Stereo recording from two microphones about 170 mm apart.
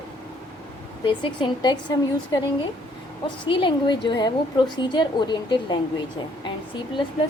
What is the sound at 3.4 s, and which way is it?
A woman's voice, 30° left (ahead or behind).